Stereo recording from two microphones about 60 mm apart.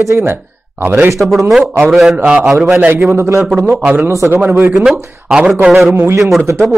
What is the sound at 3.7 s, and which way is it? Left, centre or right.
A man's voice, right.